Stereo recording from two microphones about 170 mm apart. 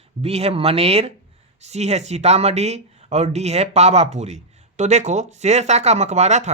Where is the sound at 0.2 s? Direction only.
35° right (ahead or behind).